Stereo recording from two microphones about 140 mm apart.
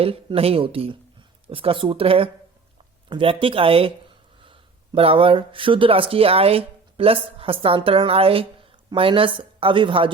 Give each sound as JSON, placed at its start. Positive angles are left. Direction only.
{"t": 0.0, "sound": "speech", "side_deg": -45}